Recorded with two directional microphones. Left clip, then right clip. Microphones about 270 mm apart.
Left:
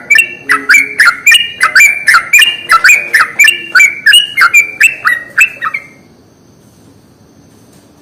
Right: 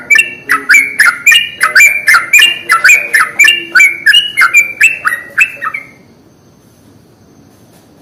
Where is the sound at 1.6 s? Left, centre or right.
Left.